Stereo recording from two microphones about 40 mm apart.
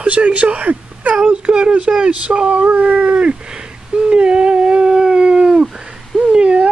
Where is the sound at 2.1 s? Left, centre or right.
Right.